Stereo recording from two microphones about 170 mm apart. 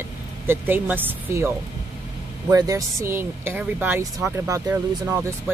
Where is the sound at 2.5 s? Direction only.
20° right (ahead or behind).